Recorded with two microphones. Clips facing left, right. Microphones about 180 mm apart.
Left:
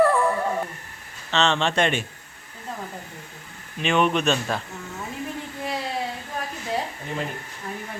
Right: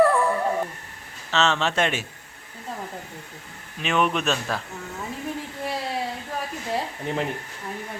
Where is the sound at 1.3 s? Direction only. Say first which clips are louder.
Left 1 dB; 5° right (ahead or behind).